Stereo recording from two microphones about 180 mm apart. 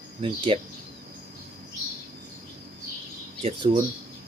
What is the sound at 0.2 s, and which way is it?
Speech, 30° right (ahead or behind).